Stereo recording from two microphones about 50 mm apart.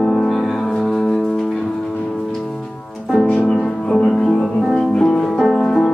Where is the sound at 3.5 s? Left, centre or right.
Centre.